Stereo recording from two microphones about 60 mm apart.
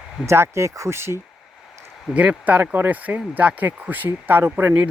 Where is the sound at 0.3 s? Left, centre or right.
Right.